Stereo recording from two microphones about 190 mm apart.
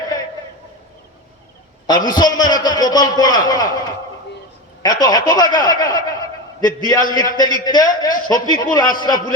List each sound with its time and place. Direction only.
1.9 s a man's voice: 20° left (ahead or behind)